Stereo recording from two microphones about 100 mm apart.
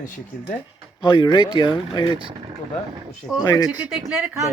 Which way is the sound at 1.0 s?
50° left (ahead or behind).